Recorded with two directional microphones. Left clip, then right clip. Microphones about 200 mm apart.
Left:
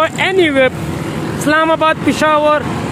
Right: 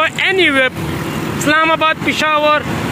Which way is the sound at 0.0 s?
10° left (ahead or behind).